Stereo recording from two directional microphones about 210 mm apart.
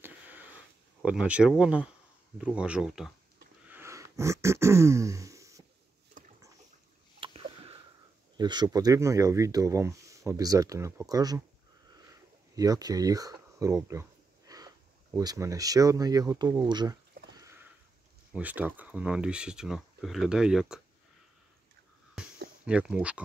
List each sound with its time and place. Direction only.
0.0 s wheeze: 10° right (ahead or behind)
1.0 s speech: 5° right (ahead or behind)
3.6 s throat clearing: 10° right (ahead or behind)
7.2 s rowboat: 25° right (ahead or behind)
8.4 s speech: 20° right (ahead or behind)
12.5 s speech: 15° right (ahead or behind)
17.4 s sniff: 15° right (ahead or behind)
18.3 s speech: 5° right (ahead or behind)
22.7 s speech: 5° right (ahead or behind)